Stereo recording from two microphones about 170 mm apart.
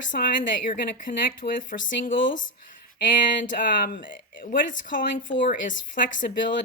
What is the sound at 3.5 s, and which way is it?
A woman's voice, 55° left (ahead or behind).